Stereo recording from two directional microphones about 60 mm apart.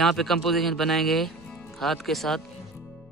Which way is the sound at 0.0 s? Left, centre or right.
Centre.